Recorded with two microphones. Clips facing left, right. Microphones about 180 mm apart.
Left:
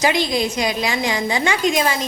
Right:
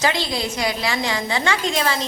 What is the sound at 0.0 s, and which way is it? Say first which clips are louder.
A woman's voice: left 4 dB; 15° left (ahead or behind).